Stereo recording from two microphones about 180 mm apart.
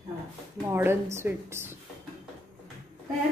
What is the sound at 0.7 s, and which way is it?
A woman's voice, 15° right (ahead or behind).